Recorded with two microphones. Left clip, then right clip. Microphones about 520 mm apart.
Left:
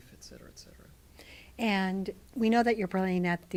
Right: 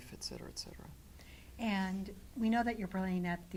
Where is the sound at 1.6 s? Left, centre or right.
Left.